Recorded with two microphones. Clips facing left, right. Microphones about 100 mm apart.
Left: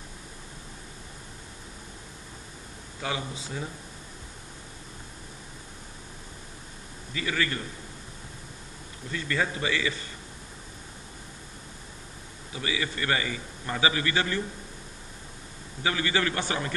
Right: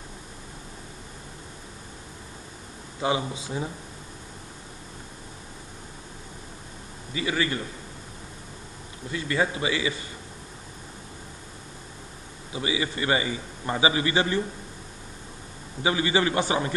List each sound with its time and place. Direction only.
3.0 s a man's voice: 20° right (ahead or behind)
7.2 s a man's voice: 15° right (ahead or behind)
9.1 s a man's voice: 15° right (ahead or behind)
12.5 s a man's voice: 20° right (ahead or behind)
15.8 s a man's voice: 20° right (ahead or behind)